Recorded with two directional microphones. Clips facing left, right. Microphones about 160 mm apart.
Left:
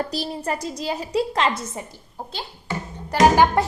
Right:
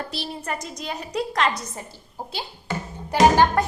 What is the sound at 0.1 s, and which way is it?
A woman's voice, 35° left (ahead or behind).